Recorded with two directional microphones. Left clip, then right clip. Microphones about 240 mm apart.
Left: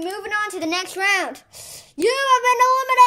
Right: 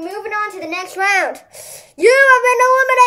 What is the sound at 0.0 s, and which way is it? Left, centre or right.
A woman's voice, left.